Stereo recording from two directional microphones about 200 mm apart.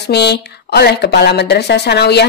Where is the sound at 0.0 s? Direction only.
55° left (ahead or behind).